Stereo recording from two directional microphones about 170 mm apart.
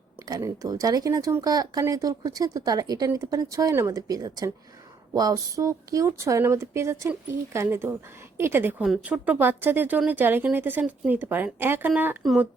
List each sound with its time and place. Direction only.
0.2 s speech: 20° right (ahead or behind); by 12.5 s centre (ahead or behind)